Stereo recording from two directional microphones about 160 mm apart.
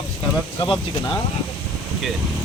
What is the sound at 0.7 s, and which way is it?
Speech, 30° left (ahead or behind).